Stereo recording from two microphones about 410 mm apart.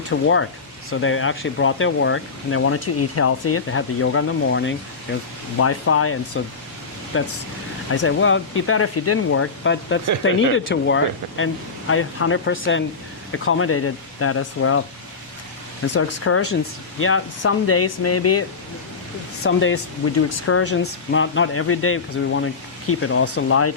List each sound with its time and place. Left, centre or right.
0.1 s speech: left
15.9 s speech: left